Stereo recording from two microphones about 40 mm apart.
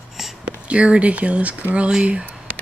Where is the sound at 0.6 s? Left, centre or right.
Right.